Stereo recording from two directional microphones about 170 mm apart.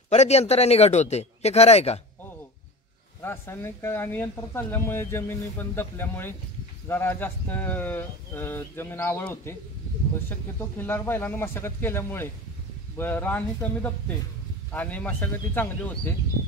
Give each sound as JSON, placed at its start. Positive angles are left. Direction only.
{"t": 0.1, "sound": "a man's voice", "side_deg": 40}
{"t": 3.2, "sound": "speech", "side_deg": 15}
{"t": 10.6, "sound": "speech", "side_deg": 10}